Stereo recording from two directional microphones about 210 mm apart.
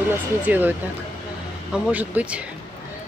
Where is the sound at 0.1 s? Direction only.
10° right (ahead or behind).